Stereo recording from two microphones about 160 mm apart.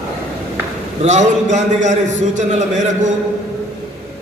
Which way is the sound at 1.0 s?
50° right (ahead or behind).